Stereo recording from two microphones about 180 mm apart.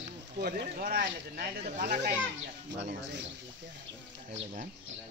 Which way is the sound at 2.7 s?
80° right.